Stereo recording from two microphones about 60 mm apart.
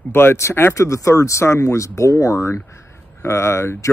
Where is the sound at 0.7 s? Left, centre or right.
Left.